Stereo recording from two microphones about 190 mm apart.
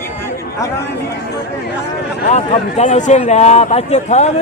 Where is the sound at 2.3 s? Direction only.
35° left (ahead or behind).